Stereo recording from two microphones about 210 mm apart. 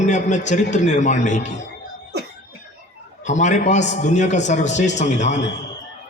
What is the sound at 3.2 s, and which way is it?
A man's voice, 35° left (ahead or behind).